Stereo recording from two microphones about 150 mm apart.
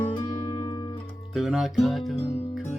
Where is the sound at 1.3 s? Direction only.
5° right (ahead or behind).